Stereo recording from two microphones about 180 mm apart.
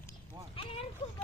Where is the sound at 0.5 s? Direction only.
30° left (ahead or behind).